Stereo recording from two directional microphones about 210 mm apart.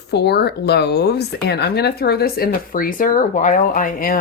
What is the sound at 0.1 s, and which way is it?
Speech, 50° left (ahead or behind).